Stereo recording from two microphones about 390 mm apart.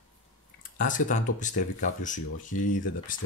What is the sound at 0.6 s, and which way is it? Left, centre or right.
Speech, left.